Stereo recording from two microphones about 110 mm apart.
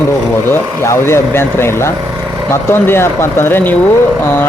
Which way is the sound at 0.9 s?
25° left (ahead or behind).